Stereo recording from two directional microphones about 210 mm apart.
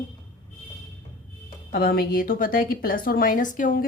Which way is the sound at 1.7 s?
45° left (ahead or behind).